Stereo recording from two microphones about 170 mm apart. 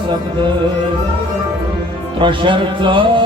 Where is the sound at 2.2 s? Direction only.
30° right (ahead or behind).